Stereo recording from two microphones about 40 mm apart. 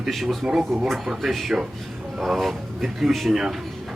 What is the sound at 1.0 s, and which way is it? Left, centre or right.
Speech, centre.